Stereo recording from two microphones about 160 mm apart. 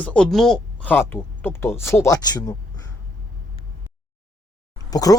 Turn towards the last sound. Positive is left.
turn(degrees=20)  # may be behind; listen again after turning